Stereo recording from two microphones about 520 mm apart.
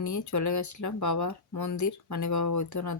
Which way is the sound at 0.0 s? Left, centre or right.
Left.